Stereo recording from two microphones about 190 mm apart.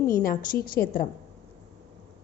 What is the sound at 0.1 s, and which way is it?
Speech, 50° left (ahead or behind).